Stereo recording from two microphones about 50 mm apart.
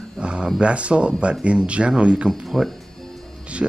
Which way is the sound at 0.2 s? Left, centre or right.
Centre.